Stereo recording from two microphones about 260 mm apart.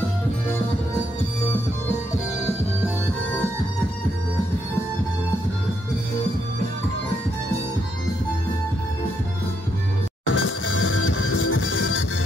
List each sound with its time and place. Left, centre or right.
10.2 s music: left